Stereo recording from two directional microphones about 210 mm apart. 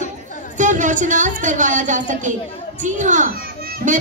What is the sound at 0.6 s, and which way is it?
Speech, 35° right (ahead or behind).